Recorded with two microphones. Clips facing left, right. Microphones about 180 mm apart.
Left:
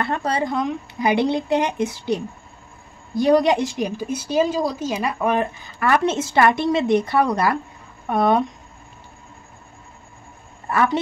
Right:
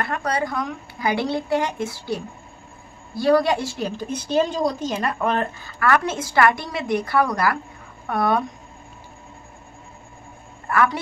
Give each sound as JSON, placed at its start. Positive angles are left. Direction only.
{"t": 0.0, "sound": "a woman's voice", "side_deg": 25}
{"t": 10.7, "sound": "a woman's voice", "side_deg": 25}